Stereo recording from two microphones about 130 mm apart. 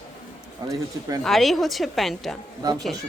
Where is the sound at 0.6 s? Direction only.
30° right (ahead or behind).